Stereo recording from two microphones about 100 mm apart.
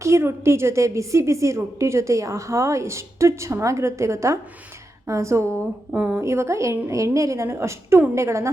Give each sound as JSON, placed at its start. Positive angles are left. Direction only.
{"t": 0.0, "sound": "a woman's voice", "side_deg": -25}
{"t": 5.9, "sound": "speech", "side_deg": -15}
{"t": 6.2, "sound": "a woman's voice", "side_deg": -30}